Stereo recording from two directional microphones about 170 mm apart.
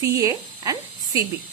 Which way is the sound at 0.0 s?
20° right (ahead or behind).